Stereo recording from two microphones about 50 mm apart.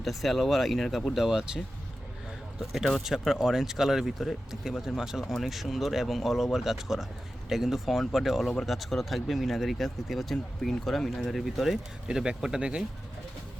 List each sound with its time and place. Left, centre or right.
0.0 s speech: centre
12.0 s speech: centre